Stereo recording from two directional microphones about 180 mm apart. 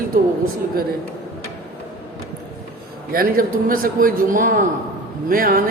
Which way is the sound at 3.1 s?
55° right (ahead or behind).